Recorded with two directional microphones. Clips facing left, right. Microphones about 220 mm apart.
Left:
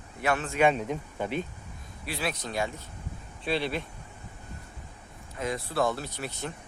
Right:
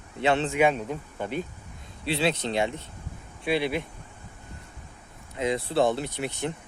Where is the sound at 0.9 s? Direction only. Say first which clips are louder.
Even; 10° left (ahead or behind).